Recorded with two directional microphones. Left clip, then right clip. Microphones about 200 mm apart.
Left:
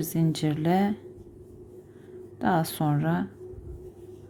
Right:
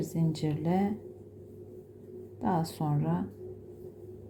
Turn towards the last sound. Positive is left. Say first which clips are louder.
# left 6 dB
turn(degrees=15)  # may be behind; listen again after turning